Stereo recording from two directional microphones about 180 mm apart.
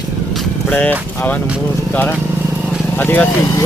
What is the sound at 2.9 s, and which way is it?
Speech, 10° left (ahead or behind).